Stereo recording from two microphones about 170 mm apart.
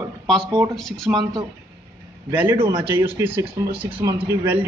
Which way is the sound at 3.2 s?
10° right (ahead or behind).